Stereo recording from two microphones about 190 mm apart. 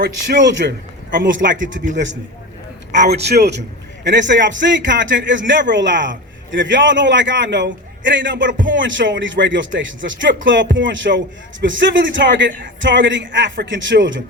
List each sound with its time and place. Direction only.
0.0 s a man's voice: 65° right (ahead or behind)
3.1 s a man's voice: 60° right (ahead or behind); by 14.2 s 75° right (ahead or behind)